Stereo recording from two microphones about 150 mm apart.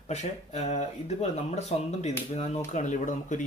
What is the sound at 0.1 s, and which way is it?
Speech, 50° left (ahead or behind).